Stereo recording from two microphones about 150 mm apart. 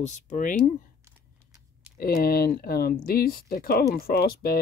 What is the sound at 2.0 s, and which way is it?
Speech, 90° left.